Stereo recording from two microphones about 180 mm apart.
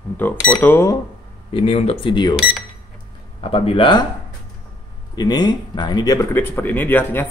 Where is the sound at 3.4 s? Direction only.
30° left (ahead or behind).